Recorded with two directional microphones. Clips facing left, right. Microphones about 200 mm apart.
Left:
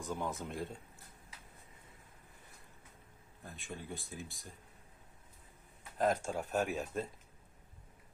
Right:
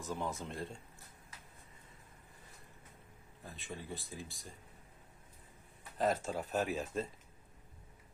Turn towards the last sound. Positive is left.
turn(degrees=0)  # may be behind; listen again after turning